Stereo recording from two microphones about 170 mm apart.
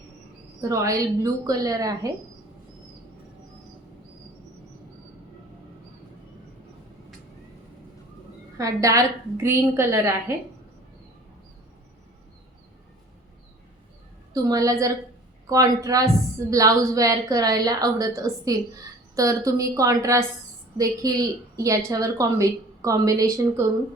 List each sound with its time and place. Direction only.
0.7 s a woman's voice: 20° right (ahead or behind)
8.5 s a woman's voice: 20° right (ahead or behind)
14.3 s a woman's voice: 20° right (ahead or behind)